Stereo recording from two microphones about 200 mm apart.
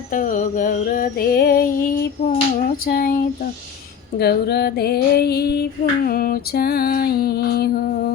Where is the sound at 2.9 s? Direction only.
50° left (ahead or behind).